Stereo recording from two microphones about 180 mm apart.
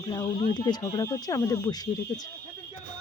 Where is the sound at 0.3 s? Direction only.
30° left (ahead or behind).